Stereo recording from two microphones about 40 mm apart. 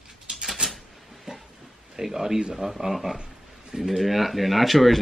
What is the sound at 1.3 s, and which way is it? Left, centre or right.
Train, centre.